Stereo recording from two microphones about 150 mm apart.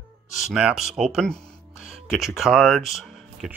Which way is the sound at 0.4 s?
5° right (ahead or behind).